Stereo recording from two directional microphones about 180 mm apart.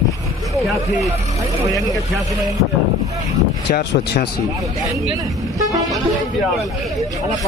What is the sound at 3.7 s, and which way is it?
Speech, 55° left (ahead or behind).